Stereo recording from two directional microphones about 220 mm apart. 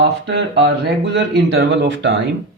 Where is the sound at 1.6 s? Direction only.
55° right (ahead or behind).